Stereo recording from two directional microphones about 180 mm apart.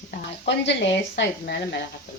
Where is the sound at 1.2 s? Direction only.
70° left (ahead or behind).